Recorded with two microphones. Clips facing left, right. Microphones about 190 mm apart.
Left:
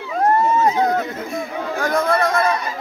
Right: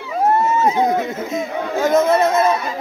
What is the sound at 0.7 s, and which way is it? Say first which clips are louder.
Speech: right 1 dB; 20° right (ahead or behind).